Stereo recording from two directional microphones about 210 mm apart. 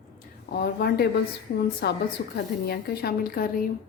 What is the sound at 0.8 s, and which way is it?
A woman's voice, 50° left (ahead or behind).